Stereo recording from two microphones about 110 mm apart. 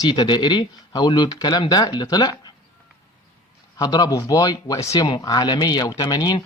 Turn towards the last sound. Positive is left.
turn(degrees=35)  # may be behind; listen again after turning